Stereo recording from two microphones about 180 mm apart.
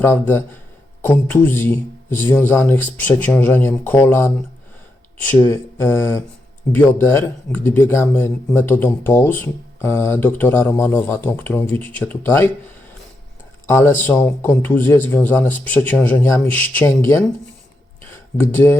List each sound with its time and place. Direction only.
0.0 s speech: 10° left (ahead or behind)
13.7 s speech: 15° left (ahead or behind)
18.3 s speech: 15° left (ahead or behind)